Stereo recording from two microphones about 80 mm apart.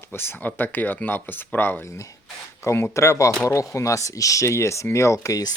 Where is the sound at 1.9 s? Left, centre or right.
Left.